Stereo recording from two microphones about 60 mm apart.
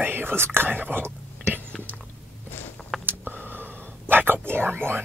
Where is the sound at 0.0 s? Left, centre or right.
Right.